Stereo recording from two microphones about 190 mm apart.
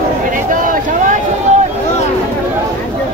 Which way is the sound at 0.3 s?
45° right (ahead or behind).